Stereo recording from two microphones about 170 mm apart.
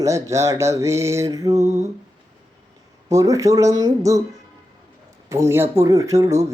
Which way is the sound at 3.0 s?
20° right (ahead or behind).